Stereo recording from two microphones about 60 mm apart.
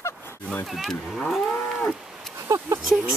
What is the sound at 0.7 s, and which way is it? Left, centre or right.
Moo, centre.